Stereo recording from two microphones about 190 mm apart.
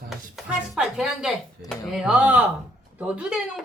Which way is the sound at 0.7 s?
5° right (ahead or behind).